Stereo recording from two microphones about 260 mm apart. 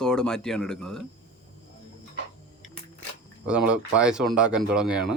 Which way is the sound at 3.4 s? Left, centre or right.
Centre.